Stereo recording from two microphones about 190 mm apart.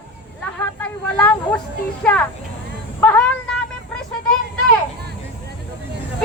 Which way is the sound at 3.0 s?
5° left (ahead or behind).